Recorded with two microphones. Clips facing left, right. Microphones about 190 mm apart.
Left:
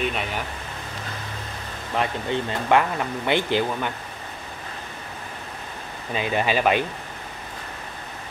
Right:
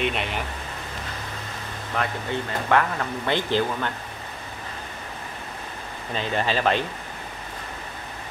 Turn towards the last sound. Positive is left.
turn(degrees=10)  # may be behind; listen again after turning